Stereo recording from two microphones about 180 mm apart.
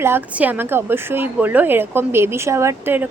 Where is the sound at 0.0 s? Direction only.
10° right (ahead or behind).